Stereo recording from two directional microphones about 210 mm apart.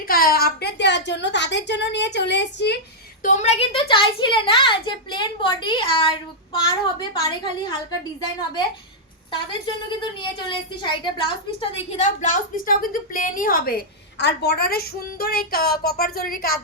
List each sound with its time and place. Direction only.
0.1 s a woman's voice: 45° left (ahead or behind)
3.2 s a child's voice: 35° left (ahead or behind)
10.0 s a woman's voice: 25° left (ahead or behind); by 16.6 s 45° left (ahead or behind)